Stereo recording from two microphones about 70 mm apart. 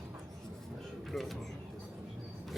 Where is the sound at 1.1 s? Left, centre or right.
Centre.